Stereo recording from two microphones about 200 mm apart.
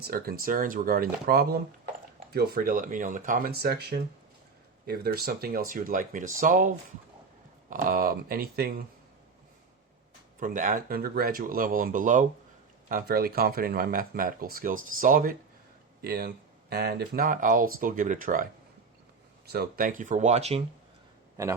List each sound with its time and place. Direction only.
0.0 s speech: 50° right (ahead or behind)
10.4 s speech: 40° right (ahead or behind)
19.5 s speech: 50° right (ahead or behind); by 20.7 s 35° right (ahead or behind)
21.4 s speech: 15° right (ahead or behind)